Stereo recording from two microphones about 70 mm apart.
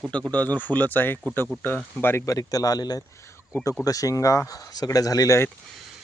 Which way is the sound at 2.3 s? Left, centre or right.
Left.